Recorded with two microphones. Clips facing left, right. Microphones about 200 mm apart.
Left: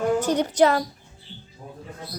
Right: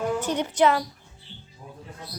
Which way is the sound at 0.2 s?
40° left (ahead or behind).